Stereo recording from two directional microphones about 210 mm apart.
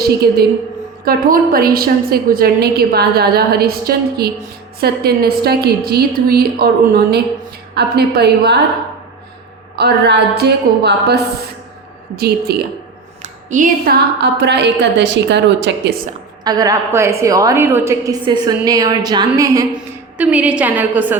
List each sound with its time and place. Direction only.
0.2 s a woman's voice: 50° right (ahead or behind)
9.7 s a woman's voice: 50° right (ahead or behind)
13.2 s a sound: 35° right (ahead or behind)
14.2 s a woman's voice: 55° right (ahead or behind)
16.4 s a woman's voice: 20° right (ahead or behind)
19.7 s a woman's voice: 5° right (ahead or behind)